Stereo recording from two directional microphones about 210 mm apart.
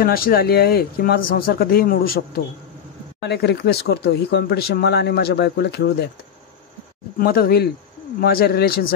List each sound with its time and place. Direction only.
0.0 s speech: 45° left (ahead or behind)
7.2 s speech: 45° left (ahead or behind)